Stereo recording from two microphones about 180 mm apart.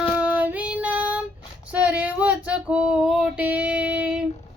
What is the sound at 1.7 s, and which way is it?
Female singing, 5° right (ahead or behind).